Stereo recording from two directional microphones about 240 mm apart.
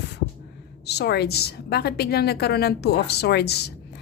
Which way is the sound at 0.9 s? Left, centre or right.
Left.